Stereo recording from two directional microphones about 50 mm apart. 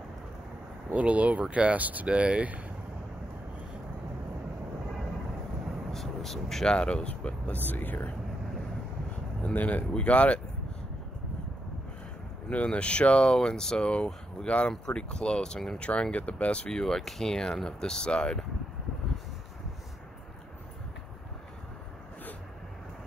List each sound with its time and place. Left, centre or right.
0.9 s speech: right
5.9 s a sound: centre
6.7 s speech: centre; by 8.1 s left
9.4 s speech: left
12.4 s speech: left
15.8 s speech: left